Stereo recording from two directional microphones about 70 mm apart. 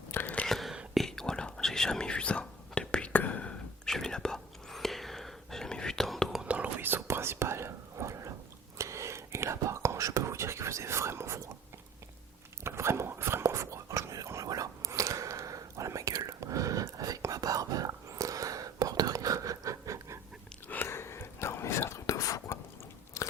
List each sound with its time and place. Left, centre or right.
0.1 s whispering: left
0.4 s whispering: centre; by 3.5 s left
3.8 s whispering: centre
6.4 s whispering: centre; by 11.4 s right
12.6 s whispering: right
14.4 s whispering: right
20.7 s a sound: left
21.4 s whispering: left
23.2 s crunch: left